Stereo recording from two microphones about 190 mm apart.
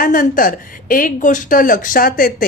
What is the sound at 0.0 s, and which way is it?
Speech, 45° left (ahead or behind).